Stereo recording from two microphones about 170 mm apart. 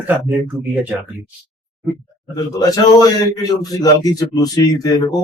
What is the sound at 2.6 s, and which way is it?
A man's voice, 20° left (ahead or behind).